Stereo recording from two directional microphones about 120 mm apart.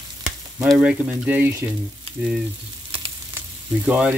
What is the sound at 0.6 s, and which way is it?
Speech, 5° right (ahead or behind).